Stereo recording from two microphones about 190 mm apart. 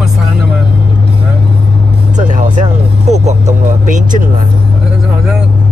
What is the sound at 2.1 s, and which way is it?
Speech, 40° right (ahead or behind).